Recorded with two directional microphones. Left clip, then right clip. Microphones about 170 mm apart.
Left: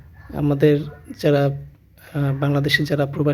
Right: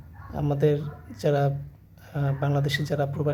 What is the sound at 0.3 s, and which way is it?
Speech, 20° left (ahead or behind).